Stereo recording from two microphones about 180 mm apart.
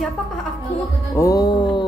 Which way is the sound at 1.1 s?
15° left (ahead or behind).